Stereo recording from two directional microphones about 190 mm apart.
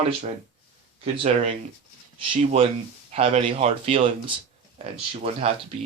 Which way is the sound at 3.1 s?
30° right (ahead or behind).